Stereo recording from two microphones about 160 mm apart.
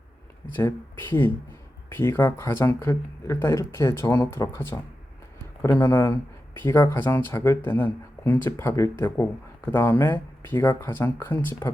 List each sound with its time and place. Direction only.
0.5 s speech: 15° left (ahead or behind)